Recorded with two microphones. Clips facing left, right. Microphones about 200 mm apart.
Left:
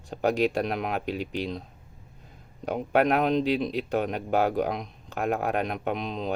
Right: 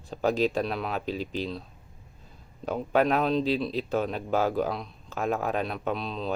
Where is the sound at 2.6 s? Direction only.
15° left (ahead or behind).